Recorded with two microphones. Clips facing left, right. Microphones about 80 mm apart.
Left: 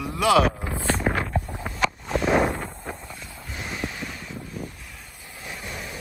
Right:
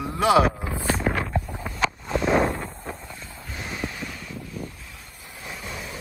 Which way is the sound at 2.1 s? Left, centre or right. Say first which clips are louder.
Even; centre.